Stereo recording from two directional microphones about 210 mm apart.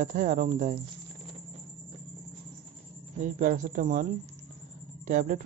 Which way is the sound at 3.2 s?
40° right (ahead or behind).